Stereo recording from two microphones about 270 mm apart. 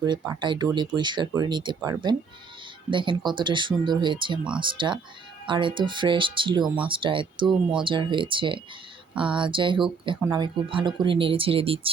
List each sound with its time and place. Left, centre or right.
0.2 s speech: centre
7.4 s speech: centre
7.9 s speech: centre